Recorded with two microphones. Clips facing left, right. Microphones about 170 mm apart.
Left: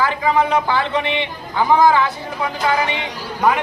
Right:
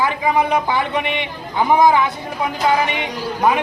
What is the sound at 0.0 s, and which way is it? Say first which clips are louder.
A man's voice: even; 15° right (ahead or behind).